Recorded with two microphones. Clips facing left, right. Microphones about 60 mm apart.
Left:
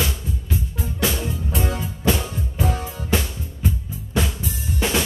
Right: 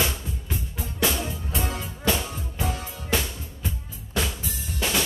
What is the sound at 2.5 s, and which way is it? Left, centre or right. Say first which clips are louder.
Music: left 5 dB; left.